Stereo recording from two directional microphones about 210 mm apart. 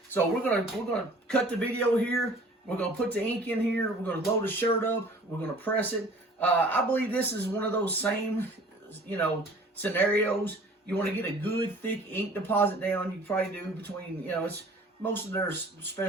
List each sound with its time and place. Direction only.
0.1 s a man's voice: 5° left (ahead or behind)